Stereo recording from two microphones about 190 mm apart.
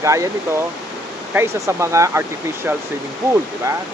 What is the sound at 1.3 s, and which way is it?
Speech, 15° right (ahead or behind).